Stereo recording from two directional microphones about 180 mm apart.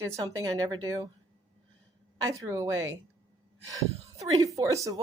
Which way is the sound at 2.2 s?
15° right (ahead or behind).